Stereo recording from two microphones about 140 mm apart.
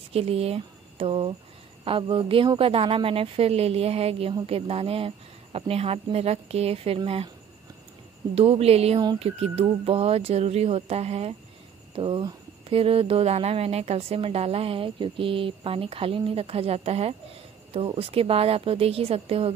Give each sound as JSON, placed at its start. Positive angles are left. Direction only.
{"t": 0.1, "sound": "speech", "side_deg": -45}
{"t": 8.4, "sound": "speech", "side_deg": -45}
{"t": 11.9, "sound": "speech", "side_deg": -35}